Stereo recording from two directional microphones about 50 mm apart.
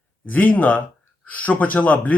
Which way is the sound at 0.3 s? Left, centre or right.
Left.